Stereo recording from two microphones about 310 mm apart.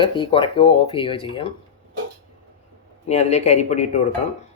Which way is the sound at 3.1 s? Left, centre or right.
Left.